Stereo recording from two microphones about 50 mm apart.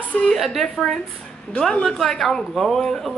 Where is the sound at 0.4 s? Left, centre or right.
Centre.